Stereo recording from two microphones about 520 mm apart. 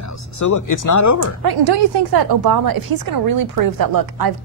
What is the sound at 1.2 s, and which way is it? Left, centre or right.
A woman's voice, right.